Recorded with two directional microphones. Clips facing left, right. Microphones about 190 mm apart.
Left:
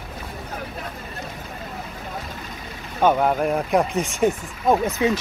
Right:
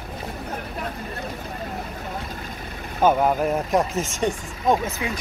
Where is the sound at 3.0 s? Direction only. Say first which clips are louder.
Even; 5° right (ahead or behind).